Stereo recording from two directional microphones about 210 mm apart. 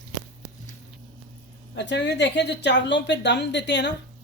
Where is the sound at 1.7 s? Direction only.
55° left (ahead or behind).